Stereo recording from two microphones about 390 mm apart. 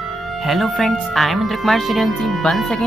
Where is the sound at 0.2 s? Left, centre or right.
Centre.